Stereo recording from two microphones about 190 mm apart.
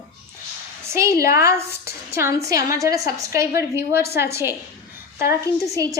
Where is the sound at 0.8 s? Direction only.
15° right (ahead or behind).